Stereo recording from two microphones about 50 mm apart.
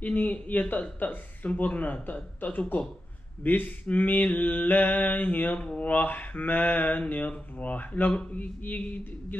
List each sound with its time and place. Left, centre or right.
0.0 s speech: left